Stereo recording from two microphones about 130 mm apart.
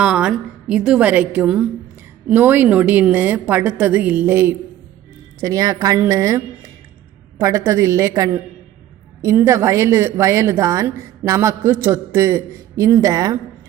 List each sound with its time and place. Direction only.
0.0 s a woman's voice: 5° right (ahead or behind)
5.4 s a woman's voice: 25° right (ahead or behind)